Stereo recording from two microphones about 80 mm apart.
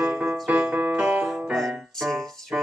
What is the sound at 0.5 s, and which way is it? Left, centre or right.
Music, centre.